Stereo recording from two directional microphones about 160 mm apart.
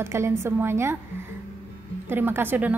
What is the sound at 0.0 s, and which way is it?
Speech, 15° right (ahead or behind).